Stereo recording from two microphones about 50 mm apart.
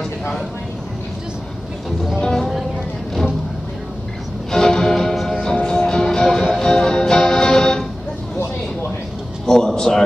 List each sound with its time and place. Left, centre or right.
4.5 s music: centre
5.4 s music: centre
9.5 s a sound: centre